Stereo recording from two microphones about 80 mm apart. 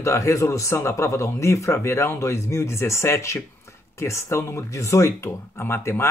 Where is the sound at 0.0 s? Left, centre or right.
Left.